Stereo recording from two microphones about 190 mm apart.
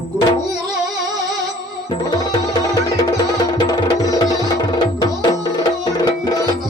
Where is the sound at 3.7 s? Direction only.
20° left (ahead or behind).